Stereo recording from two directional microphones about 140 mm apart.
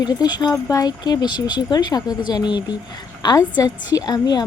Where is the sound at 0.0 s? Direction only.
30° left (ahead or behind).